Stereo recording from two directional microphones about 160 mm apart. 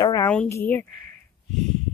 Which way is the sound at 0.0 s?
20° left (ahead or behind).